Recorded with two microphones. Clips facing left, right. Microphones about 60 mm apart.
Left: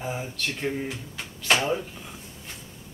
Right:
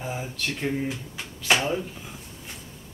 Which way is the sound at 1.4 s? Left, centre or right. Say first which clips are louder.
Even; centre.